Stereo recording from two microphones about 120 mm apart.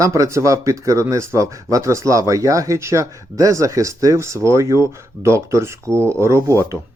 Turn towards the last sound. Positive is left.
turn(degrees=-25)  # may be behind; listen again after turning